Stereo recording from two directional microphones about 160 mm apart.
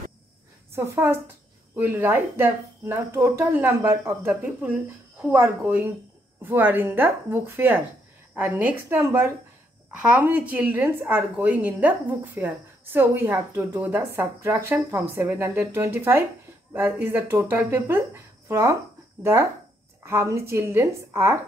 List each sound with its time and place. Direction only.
0.7 s a woman's voice: 15° right (ahead or behind)
20.1 s a woman's voice: 15° right (ahead or behind)